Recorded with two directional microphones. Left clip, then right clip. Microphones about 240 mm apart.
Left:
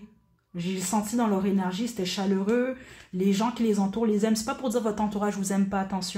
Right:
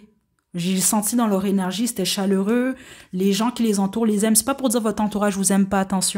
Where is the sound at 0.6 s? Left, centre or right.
Right.